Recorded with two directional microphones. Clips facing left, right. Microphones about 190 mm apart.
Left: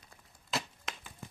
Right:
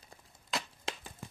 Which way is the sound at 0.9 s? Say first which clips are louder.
Right 4 dB; 30° right (ahead or behind).